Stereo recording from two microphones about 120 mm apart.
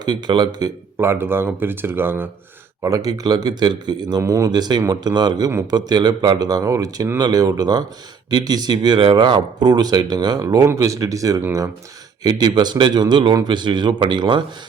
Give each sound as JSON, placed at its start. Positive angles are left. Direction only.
{"t": 0.0, "sound": "speech", "side_deg": -35}
{"t": 0.9, "sound": "speech", "side_deg": -20}
{"t": 2.8, "sound": "speech", "side_deg": -30}